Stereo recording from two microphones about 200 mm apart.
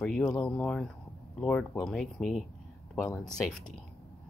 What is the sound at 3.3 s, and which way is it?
Speech, 5° left (ahead or behind).